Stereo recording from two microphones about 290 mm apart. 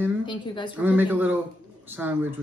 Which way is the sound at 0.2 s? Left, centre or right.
Centre.